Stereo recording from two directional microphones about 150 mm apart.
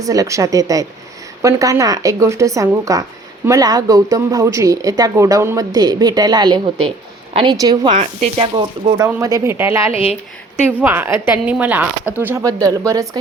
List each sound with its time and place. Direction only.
0.0 s speech: 25° right (ahead or behind)
9.0 s a woman's voice: 15° right (ahead or behind)
9.9 s a woman's voice: 40° left (ahead or behind)
10.7 s a woman's voice: 15° right (ahead or behind)